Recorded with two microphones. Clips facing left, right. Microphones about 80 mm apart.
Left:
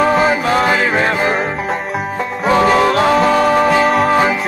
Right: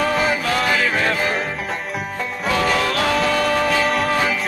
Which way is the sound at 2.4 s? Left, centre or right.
Left.